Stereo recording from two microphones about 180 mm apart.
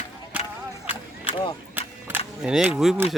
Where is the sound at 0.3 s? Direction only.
10° right (ahead or behind).